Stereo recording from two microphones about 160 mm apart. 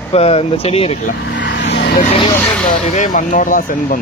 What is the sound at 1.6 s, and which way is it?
Vehicle, 90° left.